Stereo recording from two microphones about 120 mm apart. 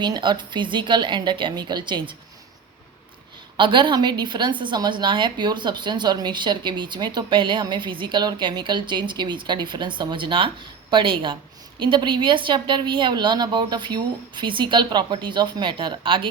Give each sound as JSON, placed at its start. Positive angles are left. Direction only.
{"t": 0.0, "sound": "a woman's voice", "side_deg": -40}
{"t": 3.6, "sound": "a woman's voice", "side_deg": -40}